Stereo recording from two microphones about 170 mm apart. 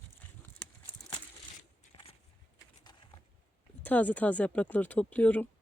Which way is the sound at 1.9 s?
30° left (ahead or behind).